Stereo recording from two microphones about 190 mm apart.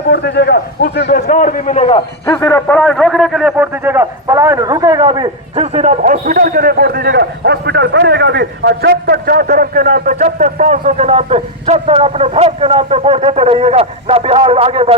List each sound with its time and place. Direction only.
0.1 s a man's voice: 60° left (ahead or behind)
1.0 s a man's voice: 45° left (ahead or behind)
1.8 s a man's voice: 30° left (ahead or behind)
2.2 s a man's voice: 15° left (ahead or behind); by 5.6 s 25° right (ahead or behind)
5.7 s a man's voice: 40° right (ahead or behind)